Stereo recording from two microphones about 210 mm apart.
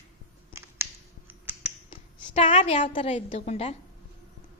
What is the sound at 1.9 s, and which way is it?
A woman's voice, 35° left (ahead or behind).